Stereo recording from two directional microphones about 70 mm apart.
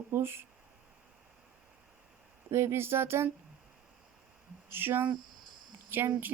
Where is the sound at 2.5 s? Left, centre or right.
Right.